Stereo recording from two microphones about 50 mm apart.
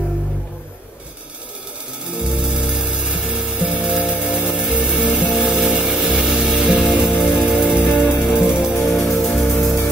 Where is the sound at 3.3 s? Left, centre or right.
Centre.